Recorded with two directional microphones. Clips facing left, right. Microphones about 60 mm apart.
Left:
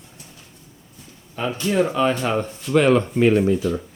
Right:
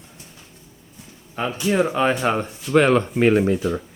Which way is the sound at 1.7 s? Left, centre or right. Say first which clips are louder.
Even; right.